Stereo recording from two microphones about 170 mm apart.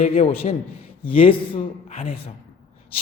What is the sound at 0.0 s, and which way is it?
A man's voice, 40° left (ahead or behind).